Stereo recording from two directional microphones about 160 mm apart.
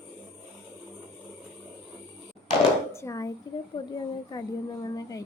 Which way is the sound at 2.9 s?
20° left (ahead or behind).